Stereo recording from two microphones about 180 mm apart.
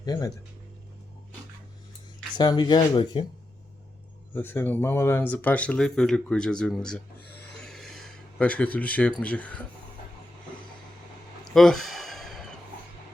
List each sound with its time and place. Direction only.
0.0 s speech: 20° left (ahead or behind)
2.4 s speech: 25° left (ahead or behind)
4.4 s speech: 10° left (ahead or behind)
7.6 s a sound: centre (ahead or behind)
9.2 s speech: 5° left (ahead or behind)
11.4 s a sound: centre (ahead or behind)